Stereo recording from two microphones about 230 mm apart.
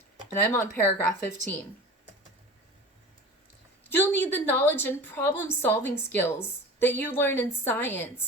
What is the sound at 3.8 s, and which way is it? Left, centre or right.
A woman's voice, centre.